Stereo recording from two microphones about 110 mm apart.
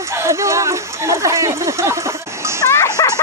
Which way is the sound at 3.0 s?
35° left (ahead or behind).